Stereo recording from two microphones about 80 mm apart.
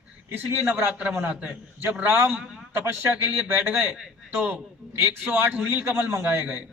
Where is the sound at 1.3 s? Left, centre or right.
Centre.